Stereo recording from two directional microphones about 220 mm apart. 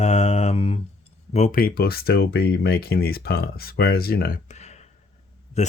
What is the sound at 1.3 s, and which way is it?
Speech, 35° left (ahead or behind).